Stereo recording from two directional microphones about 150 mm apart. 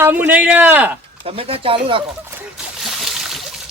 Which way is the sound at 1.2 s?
40° right (ahead or behind).